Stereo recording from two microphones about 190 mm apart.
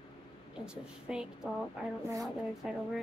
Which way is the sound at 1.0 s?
5° right (ahead or behind).